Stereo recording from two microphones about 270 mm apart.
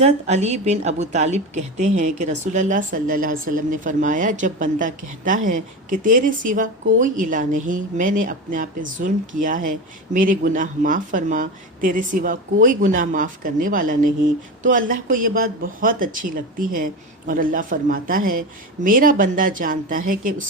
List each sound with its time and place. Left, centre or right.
0.0 s speech: right